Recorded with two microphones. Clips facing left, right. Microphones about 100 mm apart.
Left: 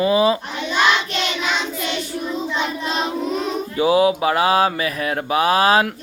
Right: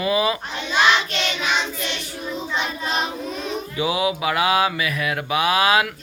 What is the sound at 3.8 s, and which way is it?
Mantra, 40° left (ahead or behind).